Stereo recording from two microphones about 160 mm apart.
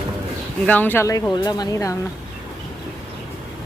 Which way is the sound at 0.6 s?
10° left (ahead or behind).